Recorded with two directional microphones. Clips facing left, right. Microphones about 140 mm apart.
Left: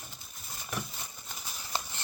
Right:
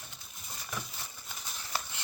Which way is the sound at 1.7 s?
25° left (ahead or behind).